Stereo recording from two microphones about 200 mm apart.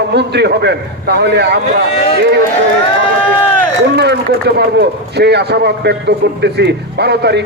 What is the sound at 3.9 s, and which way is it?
A man's voice, 55° right (ahead or behind).